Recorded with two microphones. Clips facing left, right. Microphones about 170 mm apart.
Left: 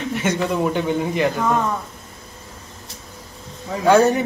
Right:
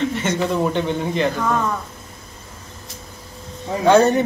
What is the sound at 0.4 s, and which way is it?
Speech, 5° left (ahead or behind).